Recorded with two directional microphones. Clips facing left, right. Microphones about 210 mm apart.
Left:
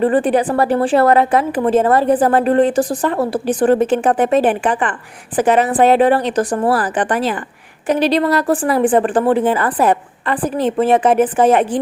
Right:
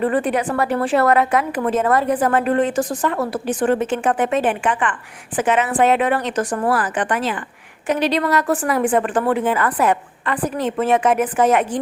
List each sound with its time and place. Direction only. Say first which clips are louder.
0.0 s a woman's voice: left 5 dB; 30° left (ahead or behind)